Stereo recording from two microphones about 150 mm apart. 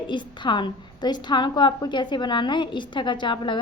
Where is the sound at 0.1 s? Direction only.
30° left (ahead or behind).